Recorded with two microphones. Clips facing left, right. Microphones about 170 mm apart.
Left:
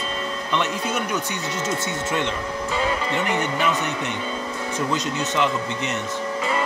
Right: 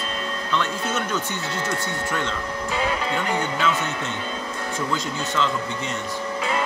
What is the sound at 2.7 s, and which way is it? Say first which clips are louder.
Music: left 1 dB; 5° right (ahead or behind).